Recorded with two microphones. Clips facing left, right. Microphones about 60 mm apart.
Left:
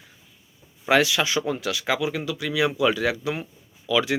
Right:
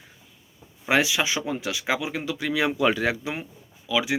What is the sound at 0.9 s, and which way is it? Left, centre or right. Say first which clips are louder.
Speech: left 2 dB; centre.